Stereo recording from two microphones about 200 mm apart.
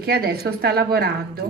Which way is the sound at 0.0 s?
50° right (ahead or behind).